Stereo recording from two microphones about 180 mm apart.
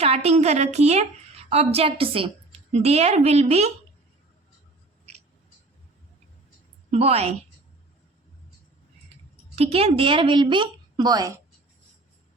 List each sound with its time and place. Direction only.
0.0 s a woman's voice: 35° right (ahead or behind)
6.9 s a woman's voice: 35° right (ahead or behind)
9.6 s a woman's voice: 35° right (ahead or behind)